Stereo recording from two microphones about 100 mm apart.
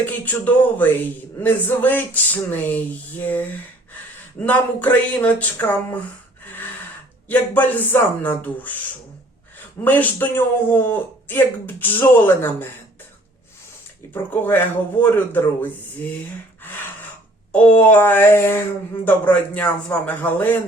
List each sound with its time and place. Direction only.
0.0 s a man's voice: 15° left (ahead or behind)
7.3 s a man's voice: 20° left (ahead or behind)
9.8 s speech: 20° left (ahead or behind)
14.1 s speech: 20° left (ahead or behind)
16.6 s gasp: 20° left (ahead or behind)
17.5 s a man's voice: 15° left (ahead or behind)